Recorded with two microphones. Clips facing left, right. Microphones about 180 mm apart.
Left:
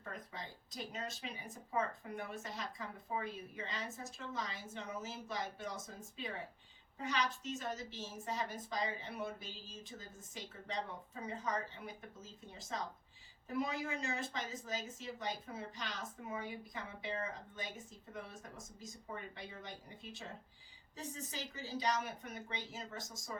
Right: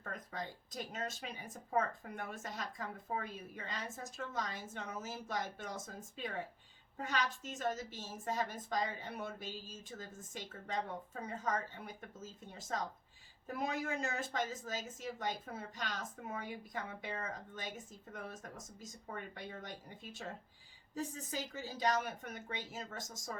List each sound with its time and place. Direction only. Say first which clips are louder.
0.0 s a woman's voice: right 4 dB; 50° right (ahead or behind)
18.8 s a woman's voice: even; 50° right (ahead or behind)
20.9 s a woman's voice: right 5 dB; 50° right (ahead or behind)